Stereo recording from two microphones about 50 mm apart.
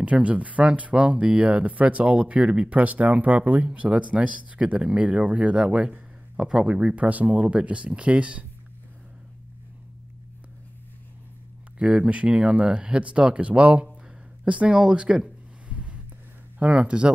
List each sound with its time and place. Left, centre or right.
0.0 s speech: right
11.8 s speech: right
15.7 s a sound: right
16.5 s speech: right